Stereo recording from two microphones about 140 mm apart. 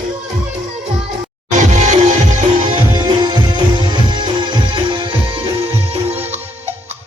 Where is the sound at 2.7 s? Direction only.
35° right (ahead or behind); by 6.7 s 50° right (ahead or behind).